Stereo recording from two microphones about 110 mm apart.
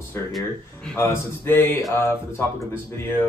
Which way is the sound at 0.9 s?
25° left (ahead or behind).